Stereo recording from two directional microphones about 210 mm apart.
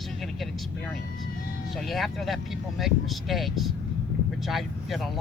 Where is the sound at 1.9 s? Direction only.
Centre (ahead or behind).